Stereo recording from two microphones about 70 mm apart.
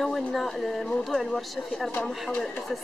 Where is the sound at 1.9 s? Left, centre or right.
Centre.